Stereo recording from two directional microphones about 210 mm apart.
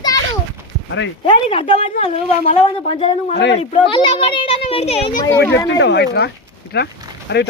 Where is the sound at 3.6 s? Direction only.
25° left (ahead or behind).